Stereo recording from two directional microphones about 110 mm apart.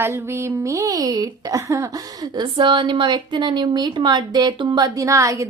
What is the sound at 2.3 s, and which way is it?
A woman's voice, 45° right (ahead or behind).